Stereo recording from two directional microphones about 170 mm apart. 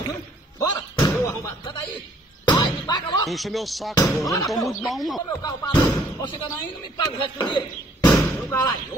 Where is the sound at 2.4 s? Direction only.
25° left (ahead or behind).